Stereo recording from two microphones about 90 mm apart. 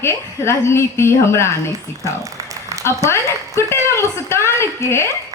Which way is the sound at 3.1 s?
30° left (ahead or behind).